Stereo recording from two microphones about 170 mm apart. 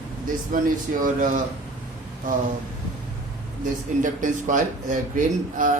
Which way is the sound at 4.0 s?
50° right (ahead or behind).